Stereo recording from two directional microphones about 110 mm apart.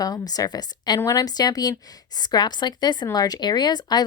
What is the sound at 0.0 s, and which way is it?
Speech, 35° left (ahead or behind).